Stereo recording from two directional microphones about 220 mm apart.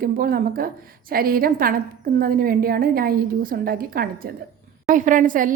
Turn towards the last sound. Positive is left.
turn(degrees=-35)  # may be behind; listen again after turning